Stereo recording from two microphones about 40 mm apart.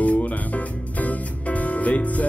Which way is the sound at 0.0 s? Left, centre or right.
Left.